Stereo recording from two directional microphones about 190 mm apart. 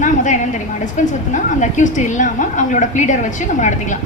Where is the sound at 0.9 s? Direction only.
40° left (ahead or behind).